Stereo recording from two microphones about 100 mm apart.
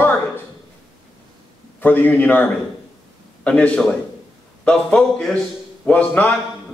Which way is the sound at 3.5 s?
10° left (ahead or behind).